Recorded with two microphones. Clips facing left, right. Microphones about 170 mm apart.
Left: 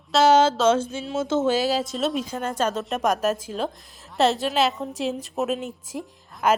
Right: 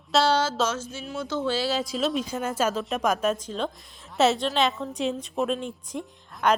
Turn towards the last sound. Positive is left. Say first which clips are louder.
# left 2 dB
turn(degrees=5)  # may be behind; listen again after turning